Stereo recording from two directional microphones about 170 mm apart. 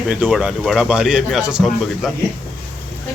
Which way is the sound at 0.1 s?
5° right (ahead or behind).